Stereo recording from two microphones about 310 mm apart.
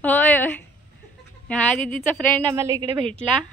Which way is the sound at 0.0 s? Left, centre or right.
Centre.